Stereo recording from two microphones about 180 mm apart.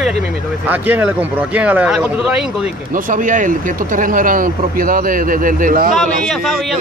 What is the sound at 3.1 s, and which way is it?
Speech, 45° right (ahead or behind).